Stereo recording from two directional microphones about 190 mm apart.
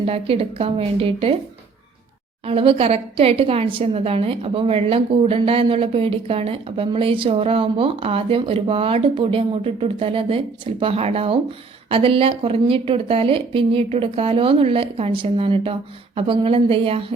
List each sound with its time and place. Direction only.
0.0 s a woman's voice: 30° right (ahead or behind)
2.5 s a woman's voice: 30° right (ahead or behind)